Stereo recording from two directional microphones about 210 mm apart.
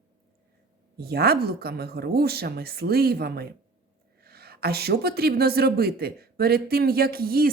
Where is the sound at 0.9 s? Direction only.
50° right (ahead or behind).